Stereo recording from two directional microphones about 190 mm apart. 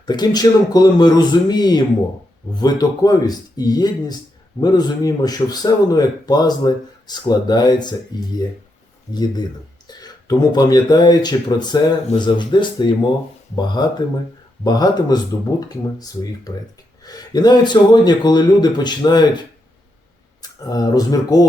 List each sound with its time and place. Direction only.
0.0 s a man's voice: 20° left (ahead or behind)
9.1 s a man's voice: 20° left (ahead or behind)
20.4 s speech: 20° left (ahead or behind)